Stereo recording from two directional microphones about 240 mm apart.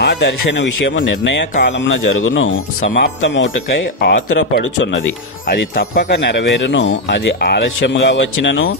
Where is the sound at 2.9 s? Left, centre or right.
Left.